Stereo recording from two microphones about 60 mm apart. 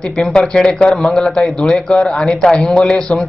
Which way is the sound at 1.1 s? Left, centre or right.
Centre.